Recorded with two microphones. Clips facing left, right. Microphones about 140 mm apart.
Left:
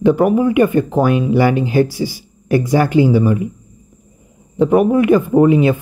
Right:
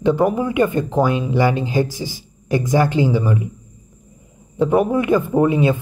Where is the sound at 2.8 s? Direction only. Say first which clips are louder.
Left 5 dB; 15° left (ahead or behind).